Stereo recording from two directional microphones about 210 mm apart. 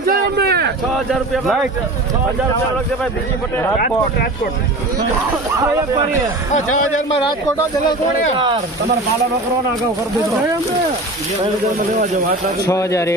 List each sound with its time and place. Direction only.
0.0 s a sound: 45° right (ahead or behind)
0.9 s speech: centre (ahead or behind)
7.1 s speech: 20° left (ahead or behind)
12.6 s speech: 15° left (ahead or behind)